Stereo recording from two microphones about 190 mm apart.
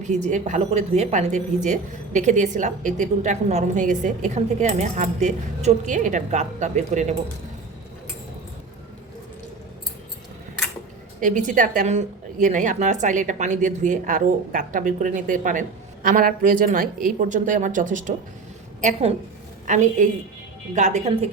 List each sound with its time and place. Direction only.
0.0 s speech: 40° right (ahead or behind)
11.2 s speech: 40° right (ahead or behind)